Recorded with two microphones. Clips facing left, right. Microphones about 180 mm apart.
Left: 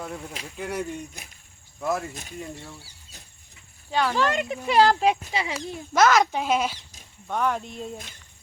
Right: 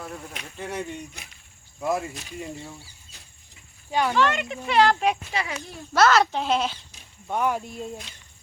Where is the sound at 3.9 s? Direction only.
15° right (ahead or behind).